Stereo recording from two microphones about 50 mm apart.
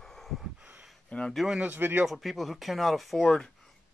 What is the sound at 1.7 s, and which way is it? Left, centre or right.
Speech, right.